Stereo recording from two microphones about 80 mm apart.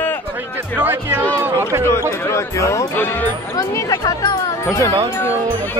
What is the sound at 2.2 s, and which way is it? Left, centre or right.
Speech, left.